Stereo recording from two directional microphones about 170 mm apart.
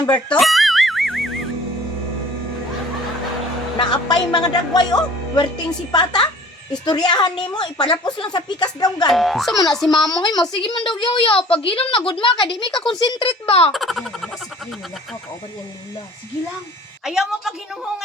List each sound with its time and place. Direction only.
0.3 s music: centre (ahead or behind)
3.8 s a woman's voice: 25° left (ahead or behind)
9.0 s a woman's voice: centre (ahead or behind)
9.9 s a woman's voice: 25° left (ahead or behind)
13.7 s a woman's voice: centre (ahead or behind)
17.0 s a woman's voice: centre (ahead or behind)